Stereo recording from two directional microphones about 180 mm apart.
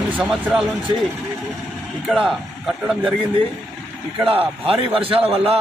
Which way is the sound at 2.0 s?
Centre (ahead or behind).